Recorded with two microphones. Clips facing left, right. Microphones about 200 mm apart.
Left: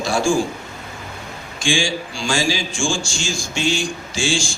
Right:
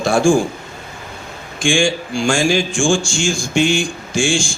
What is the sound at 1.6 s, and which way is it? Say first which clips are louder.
A man's voice: right 5 dB; 55° right (ahead or behind).